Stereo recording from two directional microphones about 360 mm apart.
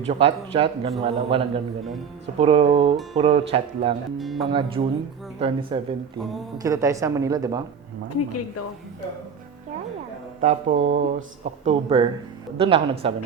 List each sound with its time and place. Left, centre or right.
0.1 s a woman's voice: centre
4.2 s speech: centre
4.4 s a woman's voice: centre
8.1 s a woman's voice: left
10.4 s a woman's voice: centre